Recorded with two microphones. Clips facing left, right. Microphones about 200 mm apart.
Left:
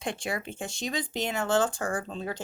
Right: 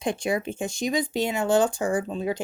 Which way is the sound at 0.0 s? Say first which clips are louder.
Right 7 dB; 20° right (ahead or behind).